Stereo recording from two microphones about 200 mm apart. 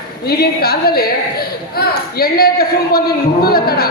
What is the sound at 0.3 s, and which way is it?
A woman's voice, 50° left (ahead or behind).